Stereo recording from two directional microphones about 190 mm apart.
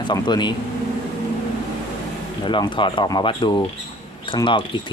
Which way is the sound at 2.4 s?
25° left (ahead or behind).